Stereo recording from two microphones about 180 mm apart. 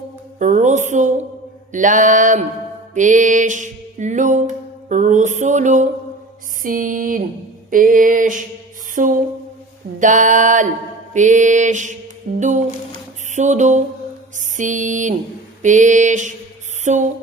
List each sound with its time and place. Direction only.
0.3 s music: 45° right (ahead or behind)
13.3 s mantra: 40° right (ahead or behind)
14.3 s music: 45° right (ahead or behind)
16.8 s a sound: 40° right (ahead or behind)